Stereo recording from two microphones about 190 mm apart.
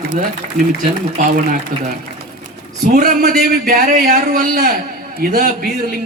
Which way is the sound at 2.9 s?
50° right (ahead or behind).